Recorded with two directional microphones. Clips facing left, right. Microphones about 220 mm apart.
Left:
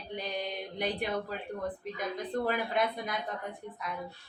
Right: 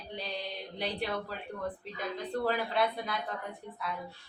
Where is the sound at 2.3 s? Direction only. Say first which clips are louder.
Even; 15° left (ahead or behind).